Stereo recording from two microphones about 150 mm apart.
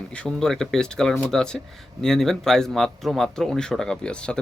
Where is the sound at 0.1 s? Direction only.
5° left (ahead or behind).